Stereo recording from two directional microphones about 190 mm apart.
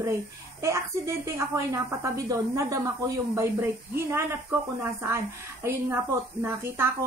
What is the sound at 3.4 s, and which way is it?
A woman's voice, 15° right (ahead or behind).